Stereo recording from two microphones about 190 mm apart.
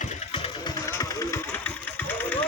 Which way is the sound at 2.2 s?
10° left (ahead or behind).